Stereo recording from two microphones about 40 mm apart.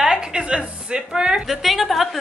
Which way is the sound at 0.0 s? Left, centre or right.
Right.